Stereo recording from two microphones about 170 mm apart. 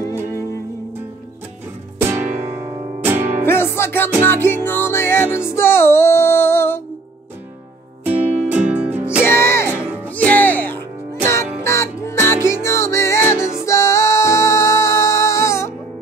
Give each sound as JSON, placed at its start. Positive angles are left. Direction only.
{"t": 0.3, "sound": "music", "side_deg": 15}
{"t": 2.0, "sound": "music", "side_deg": -15}
{"t": 3.4, "sound": "music", "side_deg": 15}
{"t": 8.0, "sound": "music", "side_deg": -10}
{"t": 9.2, "sound": "music", "side_deg": 15}